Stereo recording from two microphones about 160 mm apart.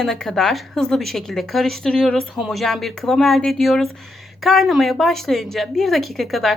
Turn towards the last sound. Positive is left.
turn(degrees=0)  # may be behind; listen again after turning